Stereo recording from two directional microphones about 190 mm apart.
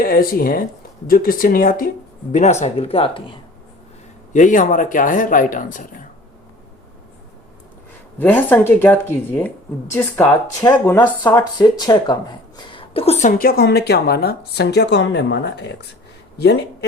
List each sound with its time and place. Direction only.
0.0 s speech: 50° left (ahead or behind); by 3.3 s 30° left (ahead or behind)
4.3 s speech: 40° left (ahead or behind)
8.2 s a woman's voice: 10° left (ahead or behind); by 15.9 s 65° left (ahead or behind)